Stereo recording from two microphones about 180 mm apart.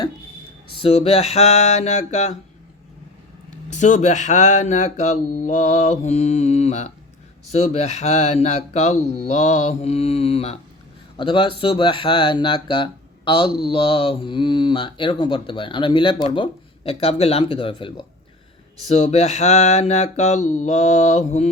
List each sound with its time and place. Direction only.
0.8 s speech: 35° left (ahead or behind)
3.7 s speech: 45° left (ahead or behind); by 18.0 s 25° left (ahead or behind)
18.9 s speech: 40° left (ahead or behind)